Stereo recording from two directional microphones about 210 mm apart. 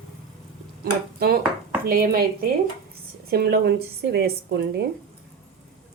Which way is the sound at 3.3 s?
50° right (ahead or behind).